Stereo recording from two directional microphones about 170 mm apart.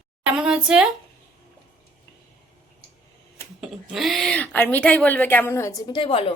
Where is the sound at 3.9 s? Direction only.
Centre (ahead or behind); by 6.2 s 30° left (ahead or behind).